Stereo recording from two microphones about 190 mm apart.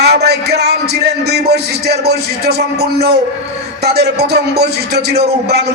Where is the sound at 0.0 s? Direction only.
60° right (ahead or behind).